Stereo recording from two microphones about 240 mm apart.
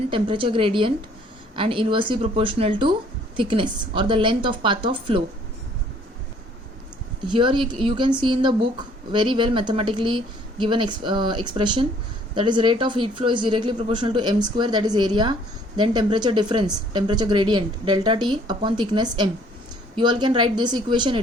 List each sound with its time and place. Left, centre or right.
0.1 s speech: right
7.3 s speech: right